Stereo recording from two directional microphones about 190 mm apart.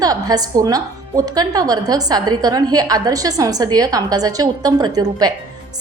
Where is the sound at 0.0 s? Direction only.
20° right (ahead or behind).